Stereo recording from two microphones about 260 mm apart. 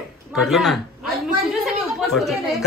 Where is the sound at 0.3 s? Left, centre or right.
Centre.